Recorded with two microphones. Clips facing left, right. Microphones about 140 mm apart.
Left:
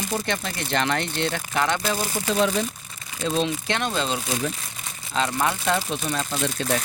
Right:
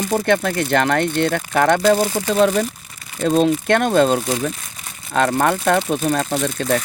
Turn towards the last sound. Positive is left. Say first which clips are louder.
# right 6 dB
turn(degrees=-55)  # may be behind; listen again after turning